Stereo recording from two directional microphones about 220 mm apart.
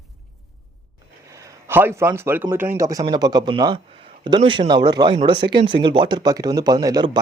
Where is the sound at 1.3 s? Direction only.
15° right (ahead or behind).